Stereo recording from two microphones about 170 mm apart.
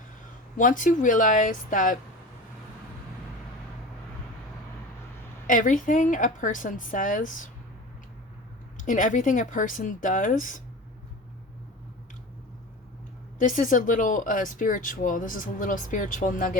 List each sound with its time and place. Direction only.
0.5 s speech: 50° left (ahead or behind)
5.5 s speech: 50° left (ahead or behind)
8.8 s speech: 50° left (ahead or behind)
13.4 s speech: 50° left (ahead or behind)